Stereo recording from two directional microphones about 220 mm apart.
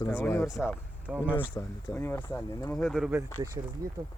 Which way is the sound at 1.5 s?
10° left (ahead or behind).